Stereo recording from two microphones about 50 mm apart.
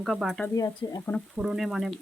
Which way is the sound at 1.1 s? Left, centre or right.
Left.